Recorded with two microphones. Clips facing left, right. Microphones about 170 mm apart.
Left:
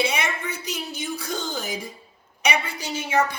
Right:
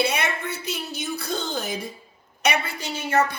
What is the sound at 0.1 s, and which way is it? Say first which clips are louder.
Speech: right 1 dB; 15° left (ahead or behind).